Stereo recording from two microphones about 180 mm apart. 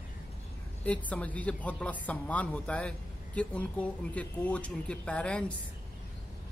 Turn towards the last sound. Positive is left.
turn(degrees=5)  # may be behind; listen again after turning